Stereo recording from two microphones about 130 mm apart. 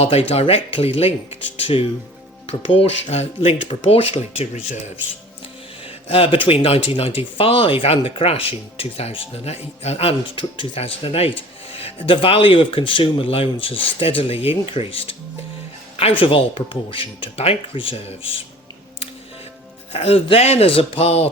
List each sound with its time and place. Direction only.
0.0 s speech: 50° left (ahead or behind)
5.8 s speech: 45° left (ahead or behind)
19.9 s speech: 50° left (ahead or behind)